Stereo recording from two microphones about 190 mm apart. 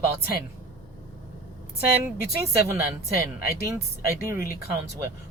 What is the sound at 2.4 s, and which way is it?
A man's voice, 10° right (ahead or behind).